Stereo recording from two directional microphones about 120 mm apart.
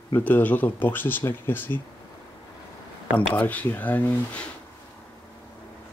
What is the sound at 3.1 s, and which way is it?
Speech, 15° left (ahead or behind).